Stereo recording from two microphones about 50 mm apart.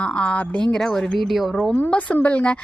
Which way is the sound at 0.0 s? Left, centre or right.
Left.